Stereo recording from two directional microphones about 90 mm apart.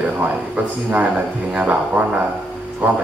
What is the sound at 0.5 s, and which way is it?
A man's voice, 15° right (ahead or behind).